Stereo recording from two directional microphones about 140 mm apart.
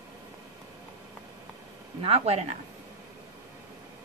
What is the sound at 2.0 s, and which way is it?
Speech, 45° right (ahead or behind).